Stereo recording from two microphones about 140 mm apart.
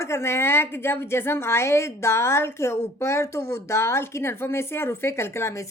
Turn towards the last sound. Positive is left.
turn(degrees=20)  # may be behind; listen again after turning